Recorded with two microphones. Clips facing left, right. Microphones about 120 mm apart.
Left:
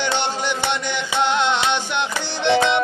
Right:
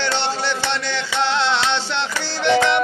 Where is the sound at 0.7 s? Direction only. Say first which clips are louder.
Even; 15° left (ahead or behind).